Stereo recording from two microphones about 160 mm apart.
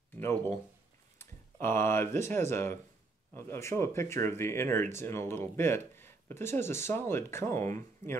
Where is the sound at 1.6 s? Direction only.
15° left (ahead or behind).